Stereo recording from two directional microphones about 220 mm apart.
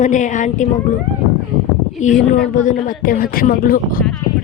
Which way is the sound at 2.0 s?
35° left (ahead or behind).